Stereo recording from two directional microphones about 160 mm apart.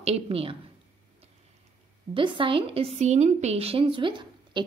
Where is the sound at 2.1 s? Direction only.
30° right (ahead or behind).